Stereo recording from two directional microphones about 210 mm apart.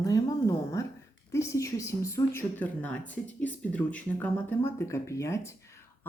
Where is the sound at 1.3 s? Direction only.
15° left (ahead or behind).